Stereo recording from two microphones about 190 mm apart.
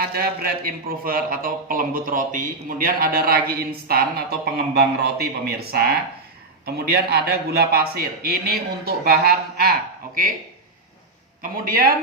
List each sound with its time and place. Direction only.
0.1 s a man's voice: 50° right (ahead or behind)
11.5 s a man's voice: 50° right (ahead or behind)